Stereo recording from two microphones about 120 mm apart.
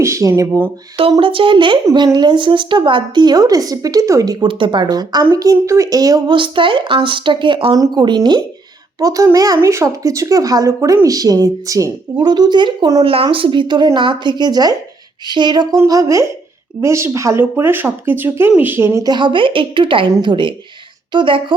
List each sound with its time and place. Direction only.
0.0 s speech: 25° right (ahead or behind)
1.2 s a woman's voice: 45° right (ahead or behind); by 4.4 s 30° right (ahead or behind)
4.4 s a woman's voice: 45° right (ahead or behind)
15.7 s speech: 25° right (ahead or behind)
19.0 s speech: 40° right (ahead or behind)